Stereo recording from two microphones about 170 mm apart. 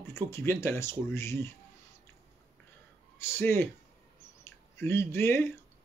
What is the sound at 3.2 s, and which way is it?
Speech, 15° left (ahead or behind).